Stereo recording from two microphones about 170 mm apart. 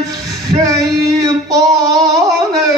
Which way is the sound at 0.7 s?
20° right (ahead or behind).